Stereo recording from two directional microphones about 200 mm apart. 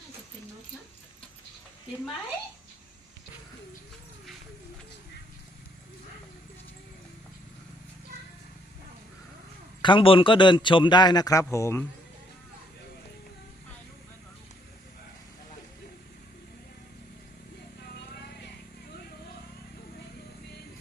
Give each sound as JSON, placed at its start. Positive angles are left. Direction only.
{"t": 9.8, "sound": "a man's voice", "side_deg": 25}